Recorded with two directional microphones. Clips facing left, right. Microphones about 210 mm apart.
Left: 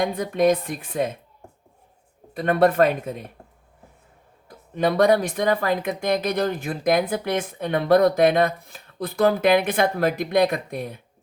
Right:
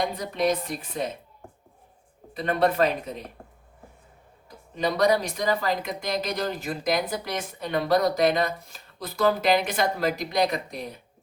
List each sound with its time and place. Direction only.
0.0 s speech: 50° left (ahead or behind)
2.3 s speech: 50° left (ahead or behind)
4.4 s speech: 55° left (ahead or behind)